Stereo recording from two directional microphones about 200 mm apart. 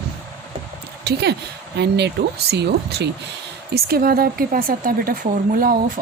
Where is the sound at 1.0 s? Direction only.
55° right (ahead or behind).